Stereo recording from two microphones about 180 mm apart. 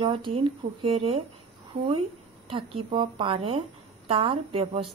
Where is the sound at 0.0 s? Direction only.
30° right (ahead or behind).